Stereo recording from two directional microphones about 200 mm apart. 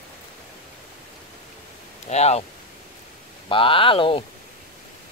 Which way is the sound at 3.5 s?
25° left (ahead or behind).